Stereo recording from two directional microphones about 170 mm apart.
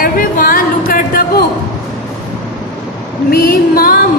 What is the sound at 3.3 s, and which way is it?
Speech, 60° left (ahead or behind).